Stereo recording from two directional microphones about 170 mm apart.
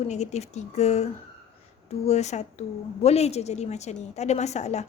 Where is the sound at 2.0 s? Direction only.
40° left (ahead or behind).